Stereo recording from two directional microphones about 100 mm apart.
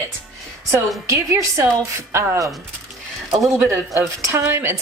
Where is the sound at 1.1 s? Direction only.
30° right (ahead or behind).